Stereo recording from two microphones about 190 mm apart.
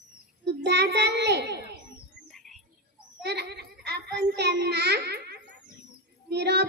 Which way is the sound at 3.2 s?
60° right (ahead or behind).